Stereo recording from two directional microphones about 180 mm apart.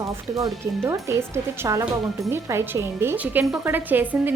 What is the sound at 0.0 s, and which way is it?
A woman's voice, 20° right (ahead or behind).